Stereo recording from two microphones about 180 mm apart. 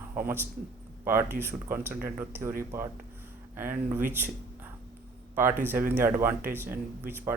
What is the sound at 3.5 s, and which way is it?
Speech, 10° right (ahead or behind).